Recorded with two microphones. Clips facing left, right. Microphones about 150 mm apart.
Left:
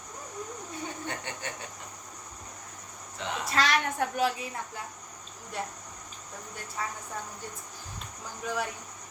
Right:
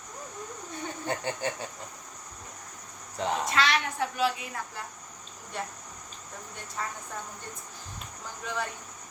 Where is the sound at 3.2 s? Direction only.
40° right (ahead or behind).